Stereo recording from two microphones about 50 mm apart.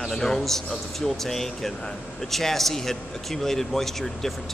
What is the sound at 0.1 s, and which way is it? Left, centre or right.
A man's voice, centre.